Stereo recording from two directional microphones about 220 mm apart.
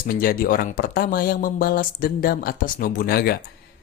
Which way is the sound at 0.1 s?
40° left (ahead or behind).